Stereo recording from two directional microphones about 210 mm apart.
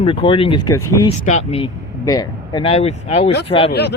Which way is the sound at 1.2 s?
30° left (ahead or behind).